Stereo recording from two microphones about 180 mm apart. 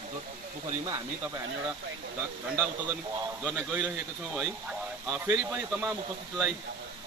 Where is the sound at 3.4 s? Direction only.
15° right (ahead or behind).